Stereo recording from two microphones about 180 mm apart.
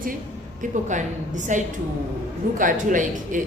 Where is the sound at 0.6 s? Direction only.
45° right (ahead or behind).